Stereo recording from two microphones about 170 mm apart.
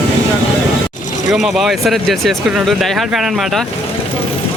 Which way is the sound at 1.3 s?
Centre (ahead or behind).